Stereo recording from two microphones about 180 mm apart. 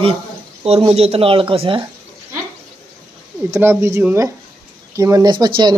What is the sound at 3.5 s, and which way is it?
Speech, 15° right (ahead or behind).